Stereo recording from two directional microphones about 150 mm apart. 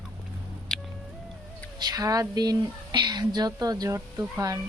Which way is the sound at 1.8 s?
25° right (ahead or behind).